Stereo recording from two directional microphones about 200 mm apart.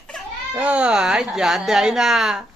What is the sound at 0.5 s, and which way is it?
A child's voice, 5° right (ahead or behind).